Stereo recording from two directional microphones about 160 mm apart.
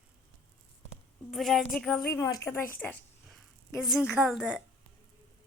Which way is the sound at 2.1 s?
20° left (ahead or behind).